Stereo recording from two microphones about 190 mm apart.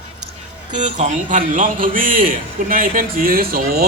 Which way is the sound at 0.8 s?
40° right (ahead or behind).